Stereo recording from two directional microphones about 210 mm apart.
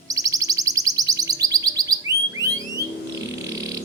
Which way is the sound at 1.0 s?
15° right (ahead or behind).